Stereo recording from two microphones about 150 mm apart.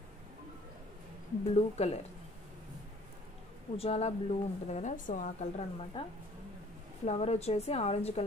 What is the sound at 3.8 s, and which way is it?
A woman's voice, 45° left (ahead or behind).